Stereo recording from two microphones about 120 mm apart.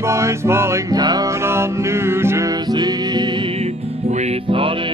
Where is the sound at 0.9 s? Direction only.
35° right (ahead or behind).